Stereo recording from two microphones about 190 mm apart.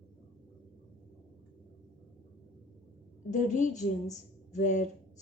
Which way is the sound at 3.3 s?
40° left (ahead or behind).